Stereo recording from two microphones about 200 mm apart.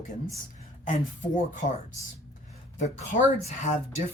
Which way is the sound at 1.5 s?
40° left (ahead or behind).